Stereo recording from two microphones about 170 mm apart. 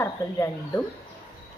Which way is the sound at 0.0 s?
15° left (ahead or behind).